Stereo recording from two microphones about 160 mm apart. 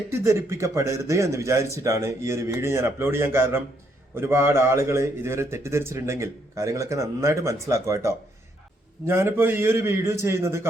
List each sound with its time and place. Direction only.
0.1 s a man's voice: 15° right (ahead or behind)